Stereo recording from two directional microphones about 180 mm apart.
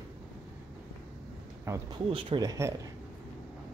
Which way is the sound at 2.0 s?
30° right (ahead or behind).